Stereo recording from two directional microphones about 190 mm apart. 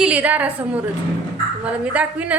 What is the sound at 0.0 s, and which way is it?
A woman's voice, 5° right (ahead or behind).